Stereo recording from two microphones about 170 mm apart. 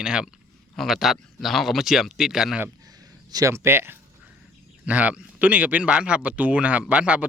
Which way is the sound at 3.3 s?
15° right (ahead or behind).